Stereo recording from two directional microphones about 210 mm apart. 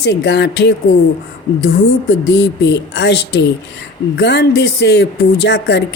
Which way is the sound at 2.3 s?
55° left (ahead or behind).